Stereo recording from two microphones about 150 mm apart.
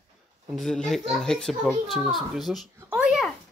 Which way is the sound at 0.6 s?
Centre (ahead or behind).